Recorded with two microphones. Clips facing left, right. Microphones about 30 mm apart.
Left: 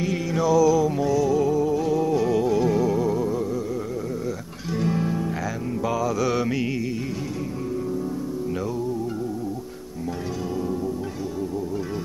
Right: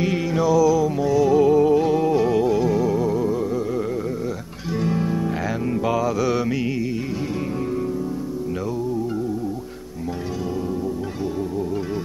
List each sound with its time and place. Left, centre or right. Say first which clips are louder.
0.3 s music: right 1 dB; centre
1.1 s music: right 8 dB; right
2.1 s music: right 2 dB; centre
4.7 s music: right 2 dB; centre
5.7 s mantra: right 3 dB; right
6.2 s mantra: right 2 dB; centre